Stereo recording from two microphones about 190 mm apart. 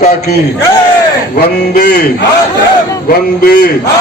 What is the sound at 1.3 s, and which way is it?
Speech, 55° left (ahead or behind).